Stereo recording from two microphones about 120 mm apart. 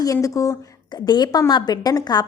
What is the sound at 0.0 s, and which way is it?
A woman's voice, 30° left (ahead or behind).